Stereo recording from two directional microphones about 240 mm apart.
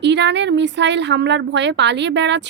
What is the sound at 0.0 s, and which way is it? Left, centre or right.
Speech, right.